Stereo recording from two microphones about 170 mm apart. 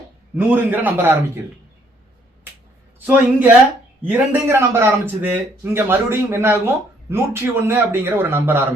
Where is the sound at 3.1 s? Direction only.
10° right (ahead or behind).